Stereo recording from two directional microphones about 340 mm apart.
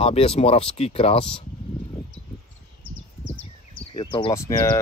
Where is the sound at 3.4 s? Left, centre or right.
Centre.